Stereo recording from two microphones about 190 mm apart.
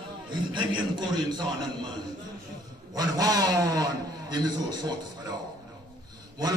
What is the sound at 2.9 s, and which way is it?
A man's voice, 20° right (ahead or behind).